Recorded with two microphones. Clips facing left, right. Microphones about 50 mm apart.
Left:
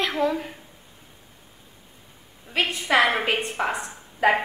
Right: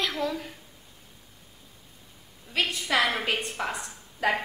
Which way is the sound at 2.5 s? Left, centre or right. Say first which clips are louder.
Left 4 dB; centre.